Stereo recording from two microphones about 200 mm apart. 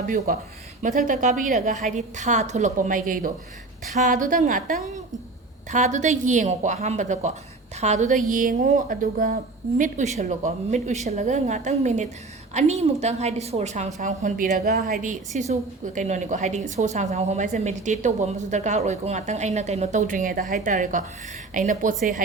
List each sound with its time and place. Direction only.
0.8 s a woman's voice: 40° right (ahead or behind)
14.5 s a woman's voice: 50° right (ahead or behind)
15.0 s a woman's voice: 40° right (ahead or behind)